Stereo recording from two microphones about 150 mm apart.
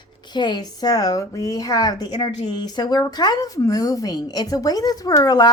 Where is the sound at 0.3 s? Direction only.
30° left (ahead or behind).